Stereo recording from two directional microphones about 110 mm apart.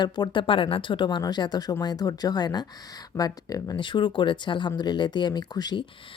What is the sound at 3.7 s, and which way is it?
Speech, 45° left (ahead or behind).